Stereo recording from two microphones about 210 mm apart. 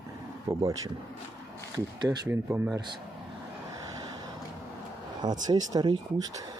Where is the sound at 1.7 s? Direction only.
15° right (ahead or behind).